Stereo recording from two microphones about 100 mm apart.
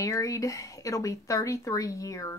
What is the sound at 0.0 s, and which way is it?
Speech, 35° left (ahead or behind).